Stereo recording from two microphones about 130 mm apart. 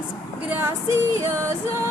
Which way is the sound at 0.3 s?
10° right (ahead or behind).